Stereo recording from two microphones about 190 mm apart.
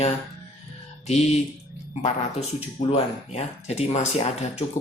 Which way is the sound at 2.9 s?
30° left (ahead or behind).